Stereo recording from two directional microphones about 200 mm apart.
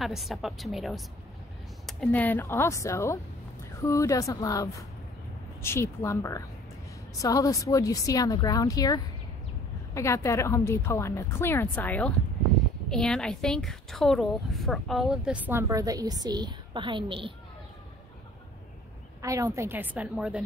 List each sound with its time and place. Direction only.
0.0 s a woman's voice: centre (ahead or behind); by 17.3 s 25° right (ahead or behind)
19.2 s a woman's voice: 15° right (ahead or behind)